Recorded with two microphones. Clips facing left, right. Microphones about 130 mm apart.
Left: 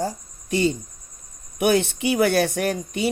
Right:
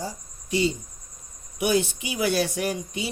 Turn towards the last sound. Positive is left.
turn(degrees=60)  # may be behind; listen again after turning